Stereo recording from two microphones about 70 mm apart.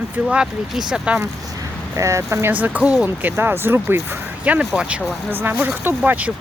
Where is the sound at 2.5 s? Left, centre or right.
Right.